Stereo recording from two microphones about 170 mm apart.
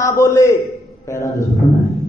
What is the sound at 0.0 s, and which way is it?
A man's voice, 15° left (ahead or behind).